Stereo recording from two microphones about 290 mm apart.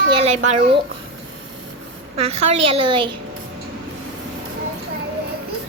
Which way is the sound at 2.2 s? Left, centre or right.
Right.